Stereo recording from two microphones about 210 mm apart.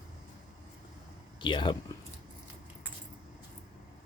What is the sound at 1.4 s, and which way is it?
Speech, 20° left (ahead or behind).